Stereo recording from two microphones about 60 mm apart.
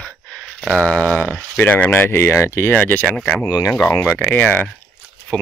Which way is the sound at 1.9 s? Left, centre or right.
Left.